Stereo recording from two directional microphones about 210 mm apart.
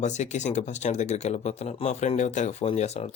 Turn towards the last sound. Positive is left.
turn(degrees=30)  # may be behind; listen again after turning